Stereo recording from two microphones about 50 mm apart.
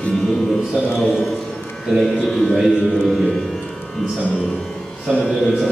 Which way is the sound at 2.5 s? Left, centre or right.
Centre.